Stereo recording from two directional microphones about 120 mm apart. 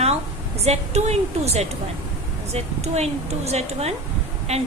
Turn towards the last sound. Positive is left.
turn(degrees=-65)  # may be behind; listen again after turning